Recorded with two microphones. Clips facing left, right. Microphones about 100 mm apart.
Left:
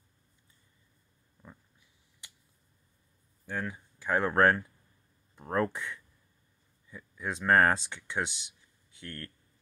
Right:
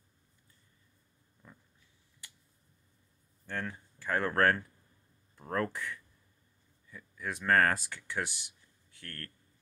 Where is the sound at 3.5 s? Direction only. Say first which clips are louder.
Left 2 dB; 10° left (ahead or behind).